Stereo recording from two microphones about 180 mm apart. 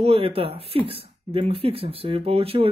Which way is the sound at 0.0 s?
30° right (ahead or behind).